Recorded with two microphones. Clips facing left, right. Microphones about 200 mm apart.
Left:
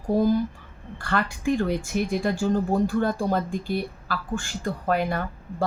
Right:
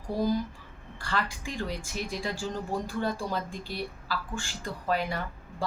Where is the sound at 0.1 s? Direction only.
55° left (ahead or behind).